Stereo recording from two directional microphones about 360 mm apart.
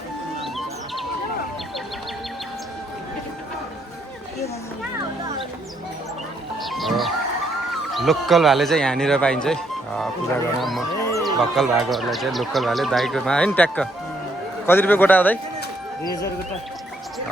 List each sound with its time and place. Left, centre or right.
0.4 s bird: centre
6.6 s music: centre
7.7 s speech: centre